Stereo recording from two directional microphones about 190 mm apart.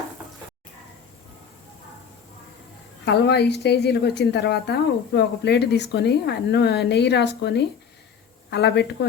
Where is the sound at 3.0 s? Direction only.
60° left (ahead or behind).